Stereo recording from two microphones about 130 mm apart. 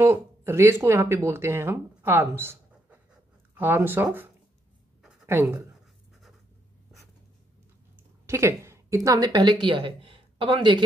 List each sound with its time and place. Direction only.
0.0 s speech: 20° right (ahead or behind)
8.3 s a woman's voice: 20° right (ahead or behind); by 9.9 s 40° right (ahead or behind)
10.0 s a sound: 40° right (ahead or behind)